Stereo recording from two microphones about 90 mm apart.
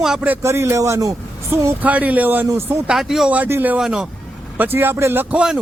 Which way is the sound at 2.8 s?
5° right (ahead or behind).